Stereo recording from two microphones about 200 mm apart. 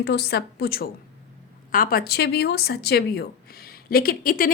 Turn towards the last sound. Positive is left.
turn(degrees=45)  # may be behind; listen again after turning